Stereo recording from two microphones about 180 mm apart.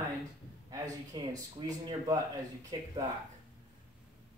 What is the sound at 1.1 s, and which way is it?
Speech, 20° right (ahead or behind).